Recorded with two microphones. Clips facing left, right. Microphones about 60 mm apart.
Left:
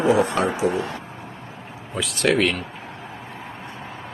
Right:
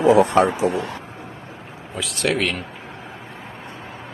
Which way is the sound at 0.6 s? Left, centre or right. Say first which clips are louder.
Right 1 dB; right.